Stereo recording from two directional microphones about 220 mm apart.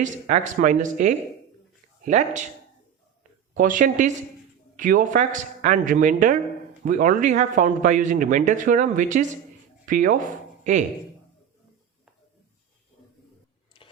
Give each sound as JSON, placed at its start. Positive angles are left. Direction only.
{"t": 0.0, "sound": "a man's voice", "side_deg": -35}
{"t": 3.5, "sound": "a man's voice", "side_deg": -35}
{"t": 13.7, "sound": "a sound", "side_deg": 25}